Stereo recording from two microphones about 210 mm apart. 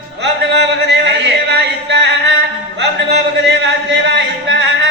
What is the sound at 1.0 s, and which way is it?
Music, 55° right (ahead or behind).